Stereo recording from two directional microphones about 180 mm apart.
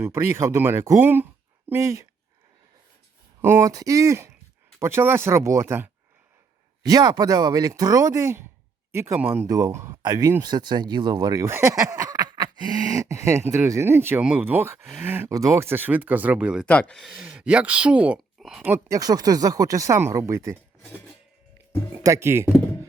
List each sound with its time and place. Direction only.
0.0 s speech: 15° right (ahead or behind)
3.4 s speech: 15° right (ahead or behind)
9.5 s speech: 20° right (ahead or behind)
16.6 s speech: 5° left (ahead or behind); by 20.6 s 15° right (ahead or behind)
22.0 s speech: 15° right (ahead or behind)